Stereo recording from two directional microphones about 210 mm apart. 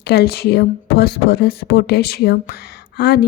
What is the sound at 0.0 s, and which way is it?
A woman's voice, 50° left (ahead or behind).